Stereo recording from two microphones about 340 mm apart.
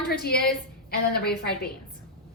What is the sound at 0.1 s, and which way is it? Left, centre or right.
A woman's voice, left.